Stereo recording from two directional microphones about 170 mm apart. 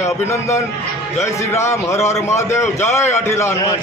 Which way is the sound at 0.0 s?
15° left (ahead or behind).